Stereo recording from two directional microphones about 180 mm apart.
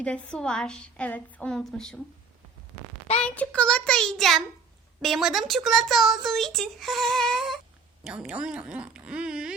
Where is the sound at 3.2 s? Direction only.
5° left (ahead or behind).